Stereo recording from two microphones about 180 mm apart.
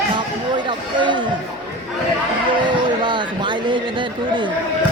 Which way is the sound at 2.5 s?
25° right (ahead or behind).